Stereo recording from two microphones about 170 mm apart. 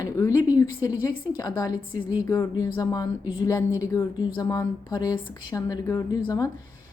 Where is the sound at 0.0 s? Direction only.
20° left (ahead or behind).